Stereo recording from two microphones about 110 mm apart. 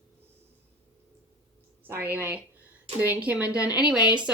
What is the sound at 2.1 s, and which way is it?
A woman's voice, 15° right (ahead or behind).